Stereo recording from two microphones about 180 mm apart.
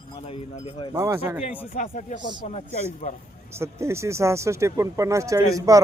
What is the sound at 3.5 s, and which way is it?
Speech, 15° right (ahead or behind).